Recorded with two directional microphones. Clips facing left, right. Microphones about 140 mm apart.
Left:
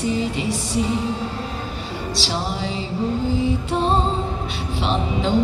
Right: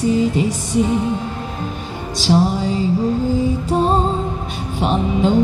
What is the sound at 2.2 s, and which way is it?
Music, 45° right (ahead or behind).